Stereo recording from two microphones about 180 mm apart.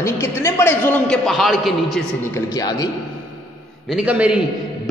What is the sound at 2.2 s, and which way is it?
Speech, 15° left (ahead or behind).